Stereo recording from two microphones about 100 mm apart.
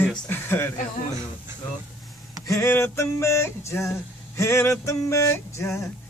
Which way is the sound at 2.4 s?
30° left (ahead or behind).